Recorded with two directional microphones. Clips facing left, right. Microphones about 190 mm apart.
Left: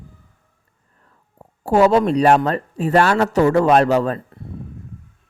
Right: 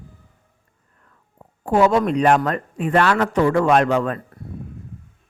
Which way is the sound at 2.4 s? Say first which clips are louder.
Left 2 dB; 30° left (ahead or behind).